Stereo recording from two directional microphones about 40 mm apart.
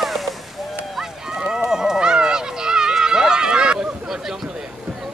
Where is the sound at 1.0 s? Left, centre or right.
Centre.